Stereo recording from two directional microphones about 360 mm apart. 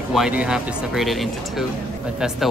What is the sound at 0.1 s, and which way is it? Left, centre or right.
Speech, centre.